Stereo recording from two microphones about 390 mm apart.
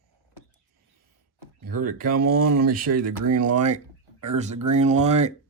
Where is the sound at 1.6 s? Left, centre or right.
Right.